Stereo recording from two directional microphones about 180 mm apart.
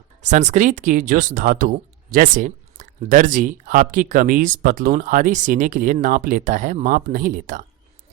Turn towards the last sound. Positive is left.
turn(degrees=-45)  # may be behind; listen again after turning